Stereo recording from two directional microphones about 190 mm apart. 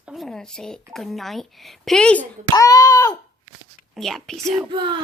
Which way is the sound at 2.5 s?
20° left (ahead or behind).